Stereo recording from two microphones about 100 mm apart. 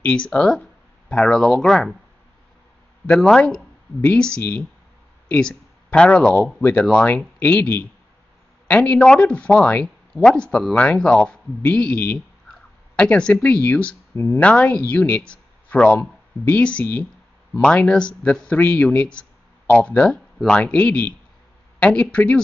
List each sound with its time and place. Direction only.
0.0 s speech: 10° left (ahead or behind)
3.1 s speech: 5° left (ahead or behind)
14.1 s speech: 25° left (ahead or behind)
14.4 s speech: 10° left (ahead or behind)